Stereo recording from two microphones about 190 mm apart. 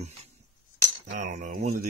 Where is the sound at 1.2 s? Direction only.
40° right (ahead or behind).